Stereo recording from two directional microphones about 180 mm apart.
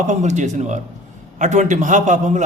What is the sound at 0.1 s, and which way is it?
A man's voice, 40° right (ahead or behind).